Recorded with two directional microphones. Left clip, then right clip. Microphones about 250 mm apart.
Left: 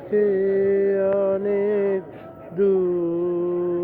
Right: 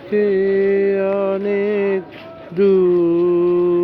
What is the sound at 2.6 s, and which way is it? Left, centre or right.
Music, right.